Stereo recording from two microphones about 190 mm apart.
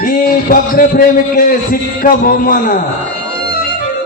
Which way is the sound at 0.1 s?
50° left (ahead or behind).